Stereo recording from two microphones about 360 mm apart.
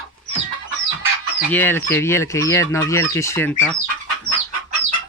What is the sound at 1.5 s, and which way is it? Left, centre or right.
Speech, centre.